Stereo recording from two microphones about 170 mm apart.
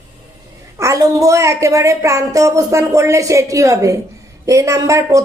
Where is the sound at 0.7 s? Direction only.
20° right (ahead or behind).